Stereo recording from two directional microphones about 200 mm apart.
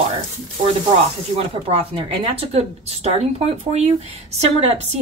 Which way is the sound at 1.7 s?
30° right (ahead or behind).